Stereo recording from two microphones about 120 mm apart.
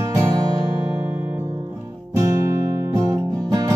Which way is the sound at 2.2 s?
25° right (ahead or behind).